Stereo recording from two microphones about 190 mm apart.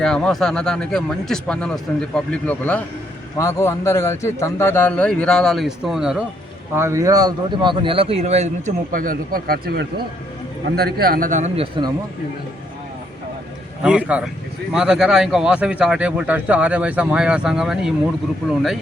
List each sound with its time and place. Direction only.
0.0 s a man's voice: 5° left (ahead or behind)
6.7 s speech: 15° right (ahead or behind); by 11.9 s 30° right (ahead or behind)
13.8 s speech: 5° right (ahead or behind)